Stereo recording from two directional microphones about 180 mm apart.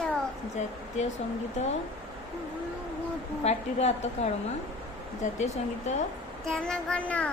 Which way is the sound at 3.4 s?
35° left (ahead or behind).